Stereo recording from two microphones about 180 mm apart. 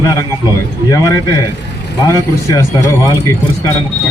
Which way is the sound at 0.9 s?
15° left (ahead or behind).